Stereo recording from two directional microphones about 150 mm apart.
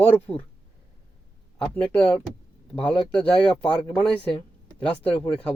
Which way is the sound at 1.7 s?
10° left (ahead or behind).